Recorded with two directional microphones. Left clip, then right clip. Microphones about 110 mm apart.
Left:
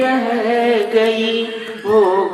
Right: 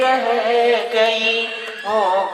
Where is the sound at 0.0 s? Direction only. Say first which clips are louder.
Even; 20° right (ahead or behind).